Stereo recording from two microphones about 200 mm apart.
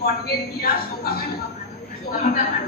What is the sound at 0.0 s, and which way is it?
A woman's voice, 50° left (ahead or behind).